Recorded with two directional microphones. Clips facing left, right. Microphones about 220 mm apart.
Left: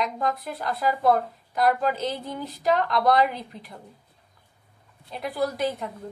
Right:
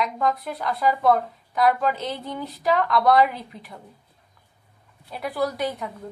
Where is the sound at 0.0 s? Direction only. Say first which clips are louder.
Right 2 dB; centre (ahead or behind).